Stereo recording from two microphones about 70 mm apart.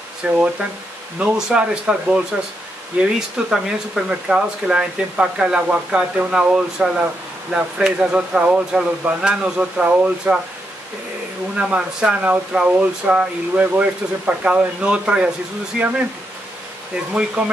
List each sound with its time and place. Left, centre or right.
0.2 s speech: centre
11.5 s speech: centre
17.4 s speech: centre